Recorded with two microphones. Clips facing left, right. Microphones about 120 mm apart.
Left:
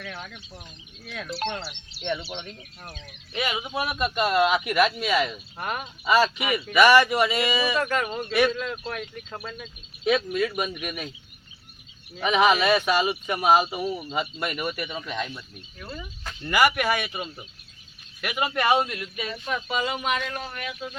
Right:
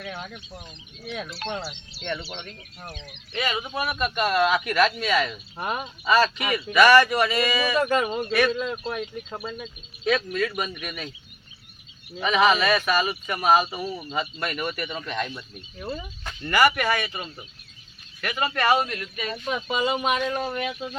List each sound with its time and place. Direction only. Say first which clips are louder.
0.0 s speech: right 3 dB; 15° right (ahead or behind)
2.0 s speech: left 2 dB; 15° left (ahead or behind)
5.5 s speech: right 2 dB; 15° right (ahead or behind)
6.1 s speech: even; 15° left (ahead or behind)
7.8 s speech: right 3 dB; 15° right (ahead or behind)
8.3 s speech: left 1 dB; 15° left (ahead or behind)
8.5 s speech: right 3 dB; 10° right (ahead or behind)
10.0 s speech: left 1 dB; 15° left (ahead or behind)
12.2 s speech: even; 15° left (ahead or behind)
15.8 s speech: right 5 dB; 20° right (ahead or behind)
16.5 s speech: right 1 dB; 10° left (ahead or behind)
19.5 s speech: right 3 dB; 20° right (ahead or behind)